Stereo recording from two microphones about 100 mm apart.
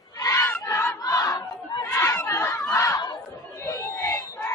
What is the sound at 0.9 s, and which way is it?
Battle cry, 35° left (ahead or behind).